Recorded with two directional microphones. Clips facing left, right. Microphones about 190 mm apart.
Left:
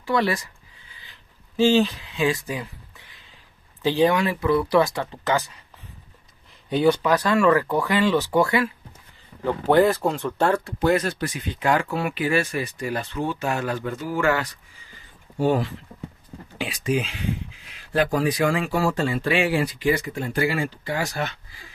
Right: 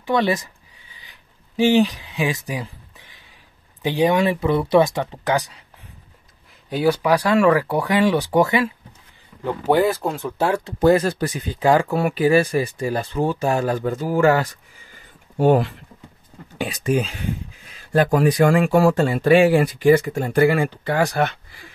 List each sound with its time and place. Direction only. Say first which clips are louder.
0.0 s speech: right 3 dB; 20° right (ahead or behind)
1.6 s speech: right 2 dB; 15° right (ahead or behind)
2.6 s a sound: right 2 dB; 20° right (ahead or behind)
3.8 s speech: right 2 dB; 15° right (ahead or behind)
6.7 s speech: right 1 dB; 5° right (ahead or behind)
9.9 s speech: even; centre (ahead or behind)
10.8 s speech: right 8 dB; 35° right (ahead or behind)
15.3 s speech: right 5 dB; 60° right (ahead or behind)
16.5 s speech: right 3 dB; 45° right (ahead or behind)
19.1 s speech: right 8 dB; 45° right (ahead or behind); by 21.4 s 60° right (ahead or behind)